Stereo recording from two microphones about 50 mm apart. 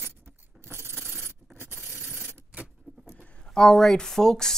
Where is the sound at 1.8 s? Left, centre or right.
Right.